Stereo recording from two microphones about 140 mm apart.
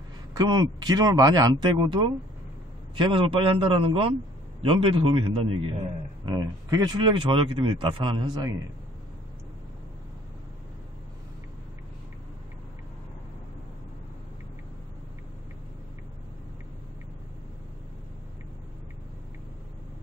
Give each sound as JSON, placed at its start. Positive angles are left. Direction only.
{"t": 0.3, "sound": "a man's voice", "side_deg": -30}
{"t": 6.2, "sound": "speech", "side_deg": -30}